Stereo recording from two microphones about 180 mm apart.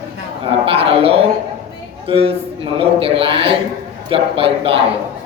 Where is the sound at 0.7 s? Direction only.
30° right (ahead or behind).